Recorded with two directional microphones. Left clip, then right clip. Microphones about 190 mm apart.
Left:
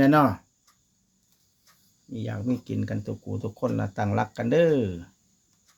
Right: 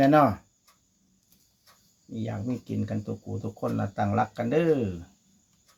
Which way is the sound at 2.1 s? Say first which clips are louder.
Left 3 dB; 45° left (ahead or behind).